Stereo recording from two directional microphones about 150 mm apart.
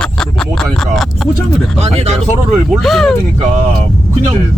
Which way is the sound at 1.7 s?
45° right (ahead or behind).